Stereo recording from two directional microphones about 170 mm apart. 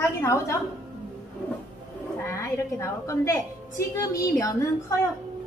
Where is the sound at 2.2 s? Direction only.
15° left (ahead or behind).